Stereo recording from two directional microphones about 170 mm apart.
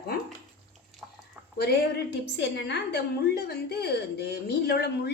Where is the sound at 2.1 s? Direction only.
85° left.